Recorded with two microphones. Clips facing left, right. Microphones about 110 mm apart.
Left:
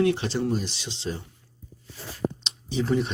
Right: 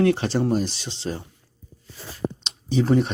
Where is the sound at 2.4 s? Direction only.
40° right (ahead or behind).